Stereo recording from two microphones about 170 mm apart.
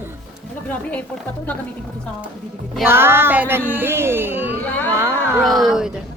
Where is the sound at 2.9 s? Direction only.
15° right (ahead or behind).